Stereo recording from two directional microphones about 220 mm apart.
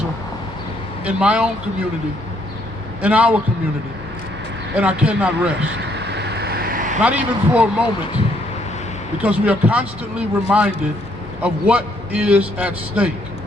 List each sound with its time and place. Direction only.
1.0 s a man's voice: 5° right (ahead or behind)
3.0 s a man's voice: 5° right (ahead or behind)
4.7 s a man's voice: 5° right (ahead or behind)
6.1 s vehicle: 50° right (ahead or behind)
7.0 s a man's voice: 5° right (ahead or behind)
9.2 s a man's voice: 5° right (ahead or behind)